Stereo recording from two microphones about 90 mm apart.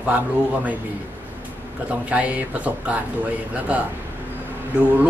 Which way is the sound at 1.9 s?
15° right (ahead or behind).